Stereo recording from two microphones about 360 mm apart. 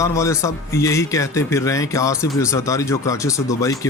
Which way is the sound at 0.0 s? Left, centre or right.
Centre.